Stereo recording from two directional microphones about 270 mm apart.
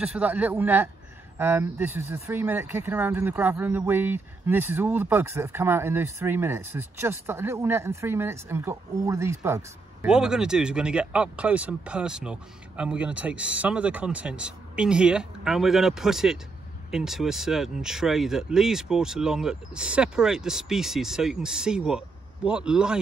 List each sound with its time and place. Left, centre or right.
0.0 s speech: centre